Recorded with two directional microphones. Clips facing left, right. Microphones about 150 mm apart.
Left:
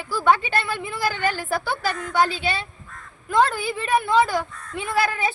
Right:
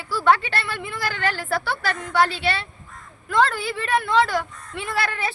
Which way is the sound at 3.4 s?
15° left (ahead or behind).